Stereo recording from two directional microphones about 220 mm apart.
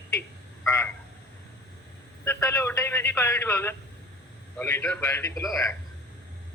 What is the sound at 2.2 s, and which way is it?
Speech, 10° left (ahead or behind).